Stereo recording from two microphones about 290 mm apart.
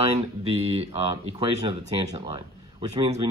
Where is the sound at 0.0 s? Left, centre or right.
Right.